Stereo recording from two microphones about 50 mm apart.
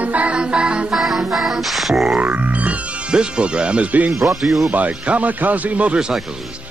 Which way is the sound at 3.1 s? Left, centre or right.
Centre.